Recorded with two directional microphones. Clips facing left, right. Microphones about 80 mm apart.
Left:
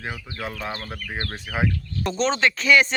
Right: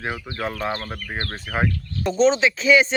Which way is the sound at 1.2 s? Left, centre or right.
Right.